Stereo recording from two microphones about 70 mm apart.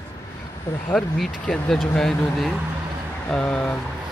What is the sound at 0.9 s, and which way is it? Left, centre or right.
Speech, centre.